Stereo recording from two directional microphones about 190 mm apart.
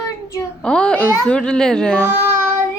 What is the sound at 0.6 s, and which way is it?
Speech, 5° left (ahead or behind).